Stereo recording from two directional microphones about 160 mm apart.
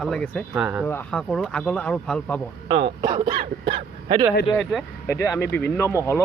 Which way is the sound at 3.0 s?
30° right (ahead or behind).